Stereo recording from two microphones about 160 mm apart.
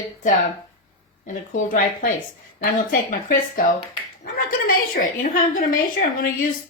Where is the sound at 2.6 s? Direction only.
55° left (ahead or behind).